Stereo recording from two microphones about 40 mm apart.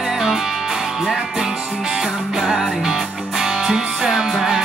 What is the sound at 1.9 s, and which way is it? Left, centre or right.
Music, centre.